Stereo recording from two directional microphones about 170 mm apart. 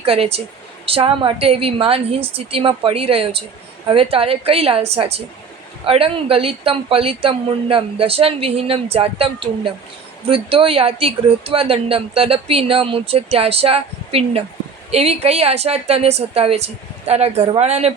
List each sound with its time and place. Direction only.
0.0 s speech: 35° right (ahead or behind)